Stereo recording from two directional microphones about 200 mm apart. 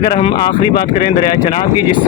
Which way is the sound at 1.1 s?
30° left (ahead or behind).